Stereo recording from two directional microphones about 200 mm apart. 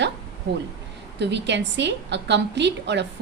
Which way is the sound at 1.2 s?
60° right (ahead or behind).